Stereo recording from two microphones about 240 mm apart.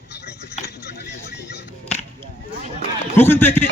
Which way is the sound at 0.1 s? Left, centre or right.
Left.